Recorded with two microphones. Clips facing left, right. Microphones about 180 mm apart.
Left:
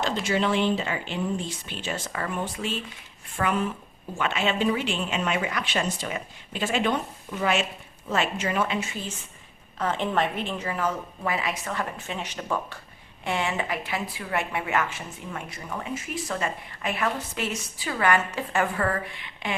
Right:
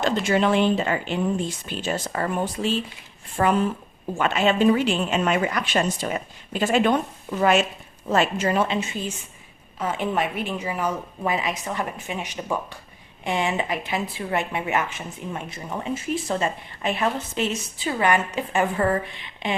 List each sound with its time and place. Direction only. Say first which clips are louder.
0.0 s a woman's voice: right 4 dB; 50° right (ahead or behind); by 3.7 s 35° right (ahead or behind)
4.2 s speech: right 6 dB; 45° right (ahead or behind)
8.1 s a woman's voice: right 5 dB; 40° right (ahead or behind)
8.6 s a woman's voice: right 3 dB; 25° right (ahead or behind)